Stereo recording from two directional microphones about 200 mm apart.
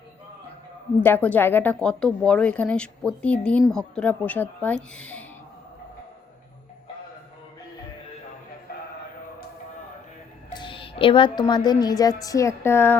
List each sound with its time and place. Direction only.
1.0 s speech: 10° left (ahead or behind)
10.5 s a woman's voice: 25° left (ahead or behind)